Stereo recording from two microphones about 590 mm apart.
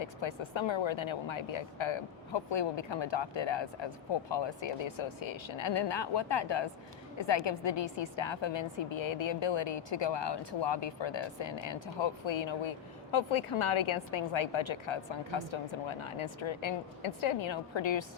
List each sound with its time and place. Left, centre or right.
0.0 s a woman's voice: left